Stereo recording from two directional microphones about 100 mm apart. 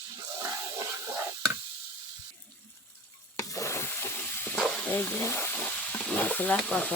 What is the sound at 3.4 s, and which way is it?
Stir, 30° left (ahead or behind).